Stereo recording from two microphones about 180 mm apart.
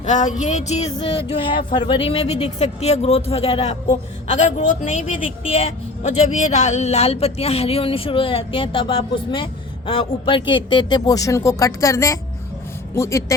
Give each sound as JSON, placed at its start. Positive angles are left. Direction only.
{"t": 0.0, "sound": "speech", "side_deg": 40}
{"t": 5.4, "sound": "a woman's voice", "side_deg": 35}